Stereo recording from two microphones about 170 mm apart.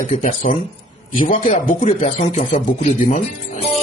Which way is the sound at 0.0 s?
50° left (ahead or behind).